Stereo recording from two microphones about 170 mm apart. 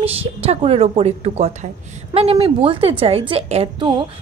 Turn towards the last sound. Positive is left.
turn(degrees=-30)  # may be behind; listen again after turning